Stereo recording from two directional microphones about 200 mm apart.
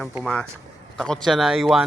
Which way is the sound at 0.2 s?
5° left (ahead or behind).